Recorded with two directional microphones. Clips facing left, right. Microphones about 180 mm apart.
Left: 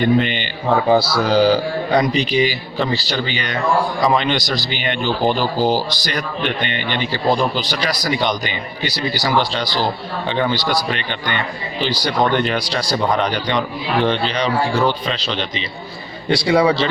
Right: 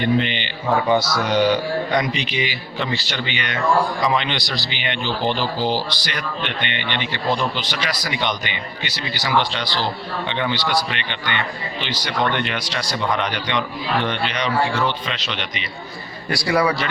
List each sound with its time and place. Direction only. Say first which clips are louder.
0.0 s speech: left 4 dB; 45° left (ahead or behind)
0.9 s a man's voice: left 4 dB; 30° left (ahead or behind)